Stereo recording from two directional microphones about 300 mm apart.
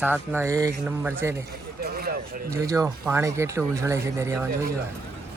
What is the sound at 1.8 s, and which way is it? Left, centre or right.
Vehicle, right.